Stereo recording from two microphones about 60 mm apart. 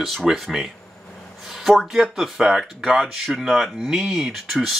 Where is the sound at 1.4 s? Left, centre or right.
Centre.